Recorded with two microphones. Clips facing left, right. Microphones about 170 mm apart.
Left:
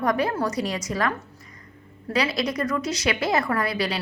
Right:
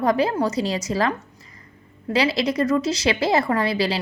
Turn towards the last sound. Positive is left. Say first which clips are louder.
# right 4 dB
turn(degrees=-30)  # may be behind; listen again after turning